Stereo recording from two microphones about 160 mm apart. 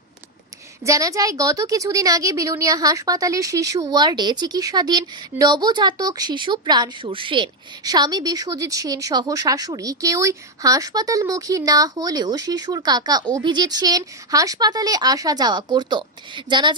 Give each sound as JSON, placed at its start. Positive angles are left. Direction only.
{"t": 0.9, "sound": "a woman's voice", "side_deg": -20}